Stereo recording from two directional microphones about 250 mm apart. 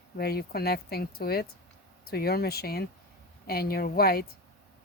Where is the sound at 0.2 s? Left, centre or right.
Left.